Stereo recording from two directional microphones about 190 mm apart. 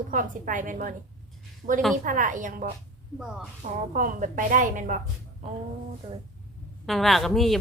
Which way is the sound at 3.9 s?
40° right (ahead or behind).